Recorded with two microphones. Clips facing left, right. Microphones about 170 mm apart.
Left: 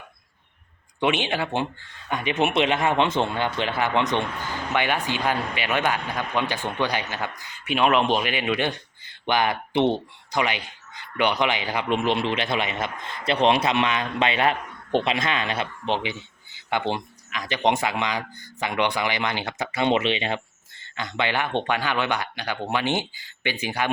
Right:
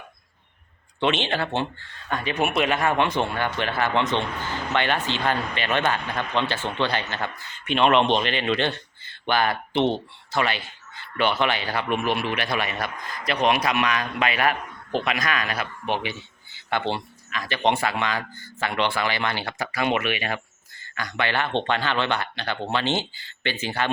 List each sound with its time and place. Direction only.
0.9 s a man's voice: 10° left (ahead or behind)